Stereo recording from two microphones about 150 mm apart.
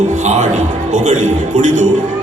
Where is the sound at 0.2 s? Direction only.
55° right (ahead or behind).